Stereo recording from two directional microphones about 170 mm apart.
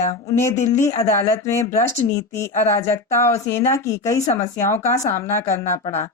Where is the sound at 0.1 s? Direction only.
20° left (ahead or behind).